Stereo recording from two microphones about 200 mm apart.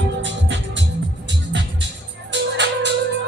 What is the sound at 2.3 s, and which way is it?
Music, 60° right (ahead or behind).